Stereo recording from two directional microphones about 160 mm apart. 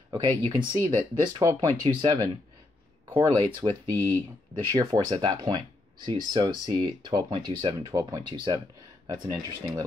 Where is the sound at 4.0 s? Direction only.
15° left (ahead or behind).